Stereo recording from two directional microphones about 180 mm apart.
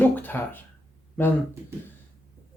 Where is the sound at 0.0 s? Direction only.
10° left (ahead or behind).